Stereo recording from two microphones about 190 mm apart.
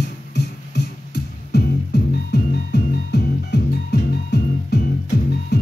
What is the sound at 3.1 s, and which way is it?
Music, 60° left (ahead or behind).